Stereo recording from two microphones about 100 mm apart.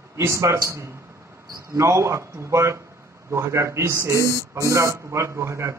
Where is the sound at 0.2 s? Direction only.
30° right (ahead or behind).